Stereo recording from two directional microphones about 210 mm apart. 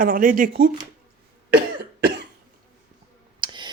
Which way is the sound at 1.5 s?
50° right (ahead or behind).